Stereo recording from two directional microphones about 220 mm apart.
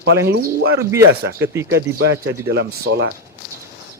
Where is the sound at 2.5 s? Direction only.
50° right (ahead or behind).